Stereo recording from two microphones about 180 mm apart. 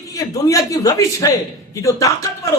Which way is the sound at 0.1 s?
20° left (ahead or behind).